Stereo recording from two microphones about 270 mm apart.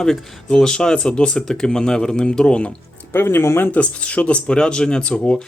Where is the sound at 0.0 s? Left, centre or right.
Centre.